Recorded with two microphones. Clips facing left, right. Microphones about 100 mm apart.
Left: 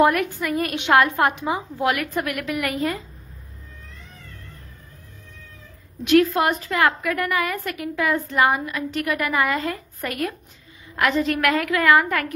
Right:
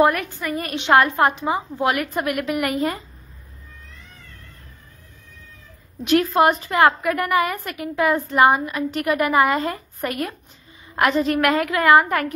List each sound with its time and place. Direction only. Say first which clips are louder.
0.1 s a woman's voice: left 2 dB; centre (ahead or behind)
0.8 s a woman's voice: right 2 dB; 20° right (ahead or behind)
6.1 s a woman's voice: right 1 dB; 30° right (ahead or behind)